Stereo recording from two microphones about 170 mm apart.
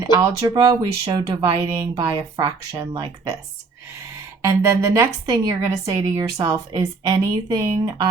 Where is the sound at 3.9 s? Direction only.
15° right (ahead or behind).